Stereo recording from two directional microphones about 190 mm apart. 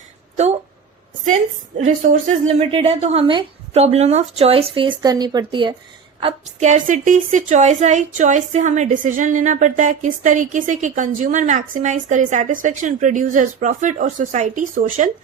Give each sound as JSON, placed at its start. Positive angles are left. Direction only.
{"t": 1.8, "sound": "a woman's voice", "side_deg": -35}